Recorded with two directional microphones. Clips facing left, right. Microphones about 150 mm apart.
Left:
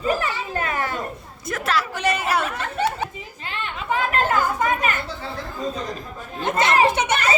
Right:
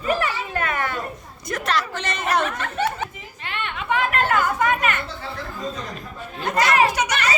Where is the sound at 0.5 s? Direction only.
30° left (ahead or behind).